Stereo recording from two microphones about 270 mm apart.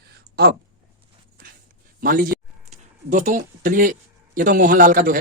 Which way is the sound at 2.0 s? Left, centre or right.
Right.